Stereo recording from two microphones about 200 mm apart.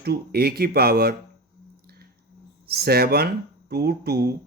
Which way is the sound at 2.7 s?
50° right (ahead or behind).